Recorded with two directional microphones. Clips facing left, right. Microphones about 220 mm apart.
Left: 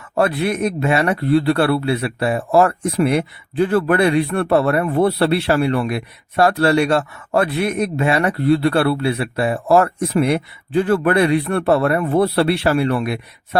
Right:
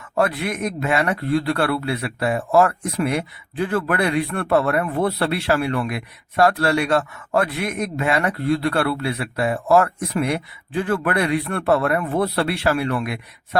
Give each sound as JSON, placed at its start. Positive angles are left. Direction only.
{"t": 0.2, "sound": "speech", "side_deg": 30}